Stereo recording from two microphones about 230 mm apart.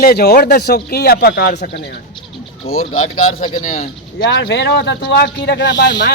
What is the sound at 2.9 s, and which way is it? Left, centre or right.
Speech, left.